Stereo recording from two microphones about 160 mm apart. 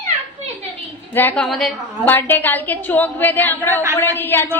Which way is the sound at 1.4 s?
Centre (ahead or behind).